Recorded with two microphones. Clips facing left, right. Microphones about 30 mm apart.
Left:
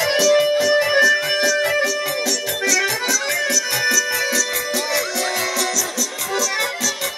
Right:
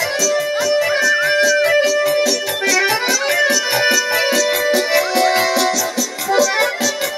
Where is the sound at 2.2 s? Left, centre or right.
Right.